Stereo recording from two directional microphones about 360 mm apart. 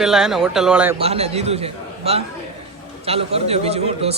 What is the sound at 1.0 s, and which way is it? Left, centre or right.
A man's voice, centre.